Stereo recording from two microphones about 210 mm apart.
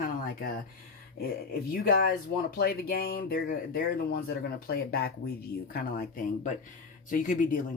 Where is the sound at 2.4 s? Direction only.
45° left (ahead or behind).